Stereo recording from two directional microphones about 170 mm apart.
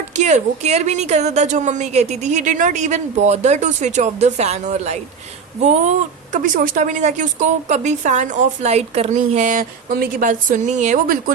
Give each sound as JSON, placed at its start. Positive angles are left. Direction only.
{"t": 0.2, "sound": "a woman's voice", "side_deg": -45}